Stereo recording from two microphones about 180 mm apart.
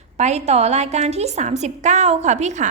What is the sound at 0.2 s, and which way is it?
A woman's voice, 40° right (ahead or behind).